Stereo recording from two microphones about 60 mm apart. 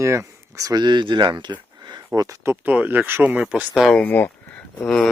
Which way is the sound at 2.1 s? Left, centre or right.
Right.